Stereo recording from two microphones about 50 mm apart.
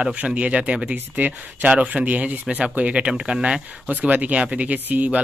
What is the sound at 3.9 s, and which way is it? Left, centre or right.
Speech, right.